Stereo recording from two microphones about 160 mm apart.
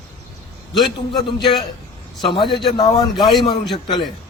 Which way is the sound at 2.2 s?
30° left (ahead or behind).